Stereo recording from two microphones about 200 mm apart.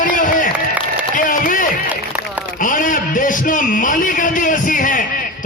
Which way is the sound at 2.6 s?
40° left (ahead or behind).